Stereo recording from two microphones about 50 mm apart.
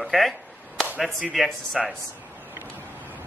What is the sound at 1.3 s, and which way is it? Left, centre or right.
Speech, centre.